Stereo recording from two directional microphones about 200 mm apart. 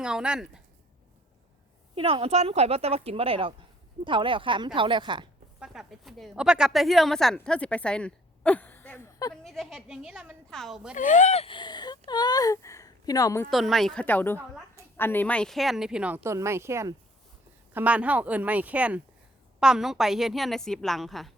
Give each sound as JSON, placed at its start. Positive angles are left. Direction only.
{"t": 0.0, "sound": "a woman's voice", "side_deg": -5}
{"t": 2.0, "sound": "a woman's voice", "side_deg": -30}
{"t": 5.5, "sound": "a woman's voice", "side_deg": -5}
{"t": 9.3, "sound": "a woman's voice", "side_deg": 0}
{"t": 10.9, "sound": "speech", "side_deg": 40}
{"t": 13.5, "sound": "a woman's voice", "side_deg": 0}